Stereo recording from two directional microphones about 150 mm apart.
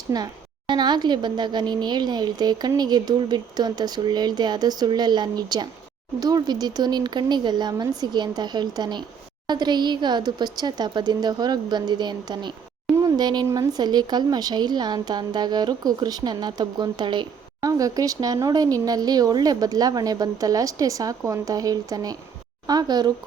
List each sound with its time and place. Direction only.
0.1 s speech: 25° right (ahead or behind)